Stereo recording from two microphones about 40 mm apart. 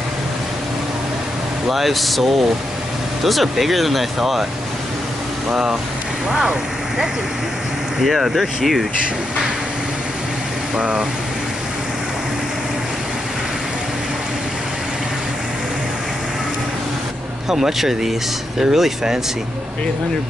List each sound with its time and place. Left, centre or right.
1.7 s speech: centre
5.5 s speech: centre
8.0 s speech: centre
10.8 s speech: centre
17.5 s speech: centre